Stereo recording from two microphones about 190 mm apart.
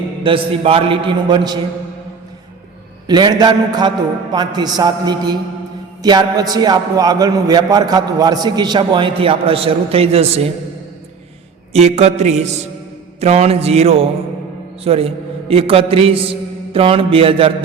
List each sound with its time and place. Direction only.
0.2 s a man's voice: 25° right (ahead or behind)
3.1 s a man's voice: 20° right (ahead or behind)
11.7 s mantra: 35° right (ahead or behind)
14.8 s a man's voice: 30° right (ahead or behind)